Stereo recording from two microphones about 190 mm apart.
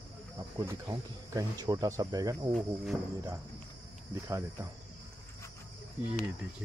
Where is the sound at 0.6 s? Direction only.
20° right (ahead or behind).